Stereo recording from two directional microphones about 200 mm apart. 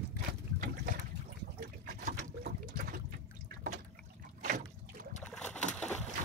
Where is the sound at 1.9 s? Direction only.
45° right (ahead or behind).